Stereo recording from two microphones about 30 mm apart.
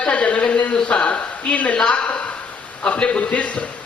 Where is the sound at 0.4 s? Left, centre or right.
Left.